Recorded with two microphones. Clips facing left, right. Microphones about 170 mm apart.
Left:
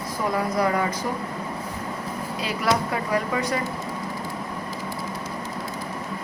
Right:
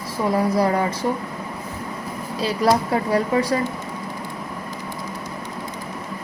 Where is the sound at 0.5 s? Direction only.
30° right (ahead or behind).